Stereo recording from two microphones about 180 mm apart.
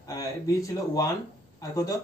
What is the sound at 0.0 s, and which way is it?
Speech, 20° left (ahead or behind).